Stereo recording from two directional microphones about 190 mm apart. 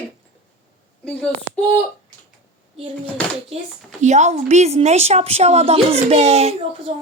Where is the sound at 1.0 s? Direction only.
5° left (ahead or behind).